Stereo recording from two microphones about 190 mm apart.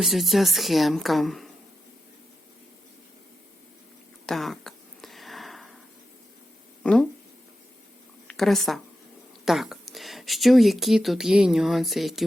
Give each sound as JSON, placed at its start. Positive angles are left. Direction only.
{"t": 0.0, "sound": "speech", "side_deg": 0}
{"t": 4.3, "sound": "a sound", "side_deg": 0}
{"t": 6.8, "sound": "speech", "side_deg": 5}
{"t": 8.3, "sound": "speech", "side_deg": 0}